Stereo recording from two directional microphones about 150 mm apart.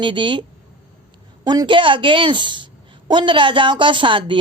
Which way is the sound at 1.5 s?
30° right (ahead or behind).